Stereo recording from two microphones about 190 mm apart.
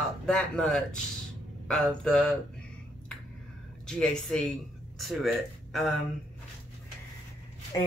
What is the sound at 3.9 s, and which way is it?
Speech, 5° left (ahead or behind).